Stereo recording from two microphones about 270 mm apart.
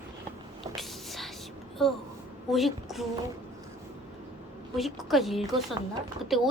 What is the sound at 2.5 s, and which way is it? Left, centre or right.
Speech, centre.